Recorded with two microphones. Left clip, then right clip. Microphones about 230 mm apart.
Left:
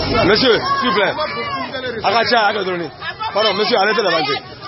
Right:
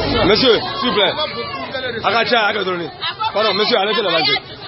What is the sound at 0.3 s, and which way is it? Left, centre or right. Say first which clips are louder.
Speech: even; centre.